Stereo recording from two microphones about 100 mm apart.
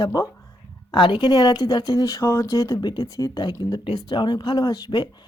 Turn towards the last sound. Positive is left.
turn(degrees=45)  # may be behind; listen again after turning